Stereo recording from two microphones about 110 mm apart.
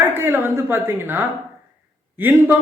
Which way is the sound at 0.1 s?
20° right (ahead or behind).